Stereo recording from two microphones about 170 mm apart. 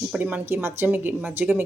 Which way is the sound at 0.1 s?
10° right (ahead or behind).